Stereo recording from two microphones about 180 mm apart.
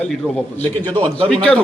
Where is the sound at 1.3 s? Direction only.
5° left (ahead or behind).